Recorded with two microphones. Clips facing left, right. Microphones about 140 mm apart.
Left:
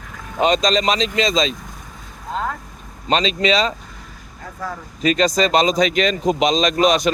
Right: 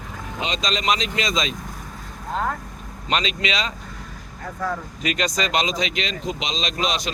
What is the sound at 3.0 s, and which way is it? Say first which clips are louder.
Speech: left 6 dB; 30° left (ahead or behind).